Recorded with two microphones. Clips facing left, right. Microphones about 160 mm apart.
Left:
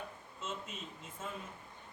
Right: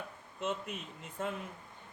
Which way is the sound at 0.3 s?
60° right (ahead or behind).